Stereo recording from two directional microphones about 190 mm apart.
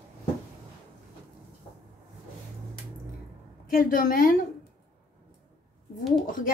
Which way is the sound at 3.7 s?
45° left (ahead or behind).